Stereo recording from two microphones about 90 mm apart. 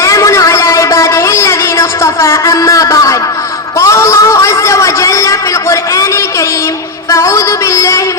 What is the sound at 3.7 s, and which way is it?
A man's voice, 35° left (ahead or behind).